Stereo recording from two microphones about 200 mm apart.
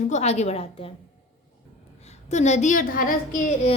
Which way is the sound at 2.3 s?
35° left (ahead or behind).